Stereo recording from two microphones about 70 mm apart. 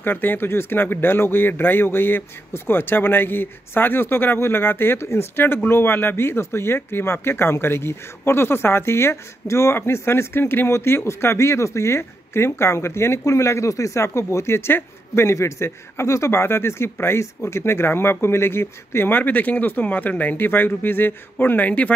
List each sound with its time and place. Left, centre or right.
0.0 s speech: left
15.2 s speech: left